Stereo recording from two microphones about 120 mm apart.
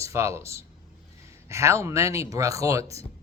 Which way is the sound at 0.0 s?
25° right (ahead or behind).